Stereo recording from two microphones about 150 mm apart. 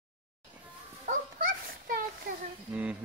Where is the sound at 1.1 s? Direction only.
70° right (ahead or behind).